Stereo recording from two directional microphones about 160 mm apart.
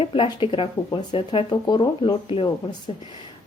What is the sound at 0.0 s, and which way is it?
Speech, 35° left (ahead or behind).